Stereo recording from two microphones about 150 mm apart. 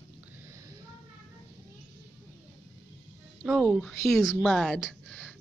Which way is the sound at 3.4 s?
5° right (ahead or behind).